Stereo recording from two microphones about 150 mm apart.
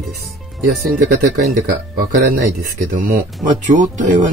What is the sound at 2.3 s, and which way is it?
Speech, 70° right (ahead or behind).